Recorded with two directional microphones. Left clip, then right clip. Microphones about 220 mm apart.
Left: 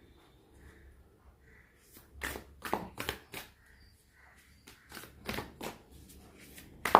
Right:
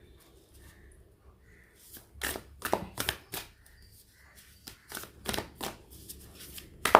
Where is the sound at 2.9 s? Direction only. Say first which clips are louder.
Right 5 dB; 25° right (ahead or behind).